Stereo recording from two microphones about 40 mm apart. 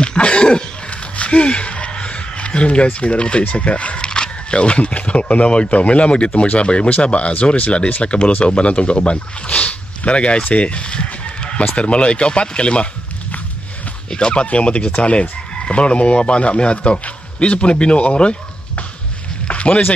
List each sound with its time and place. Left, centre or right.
0.0 s cough: left
1.1 s a sound: left
4.6 s speech: left
14.1 s speech: left
14.4 s speech: left
19.4 s music: left